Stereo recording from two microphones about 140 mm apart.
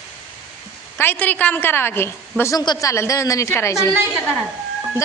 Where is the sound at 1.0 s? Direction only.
15° left (ahead or behind).